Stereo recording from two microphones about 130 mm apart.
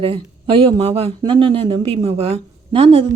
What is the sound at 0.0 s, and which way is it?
A woman's voice, 45° right (ahead or behind).